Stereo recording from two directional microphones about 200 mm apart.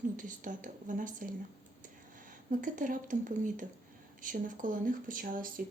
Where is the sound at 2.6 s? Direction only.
40° right (ahead or behind).